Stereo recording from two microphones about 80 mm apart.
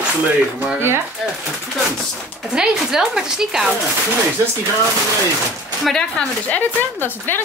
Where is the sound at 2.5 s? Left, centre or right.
Centre.